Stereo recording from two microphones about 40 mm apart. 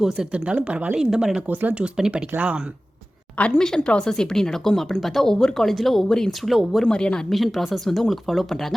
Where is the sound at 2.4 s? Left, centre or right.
Right.